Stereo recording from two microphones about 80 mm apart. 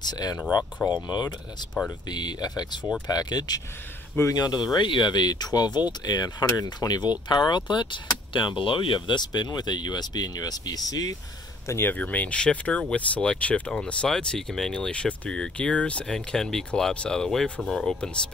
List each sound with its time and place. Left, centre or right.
0.0 s speech: left
11.6 s speech: left
11.9 s speech: centre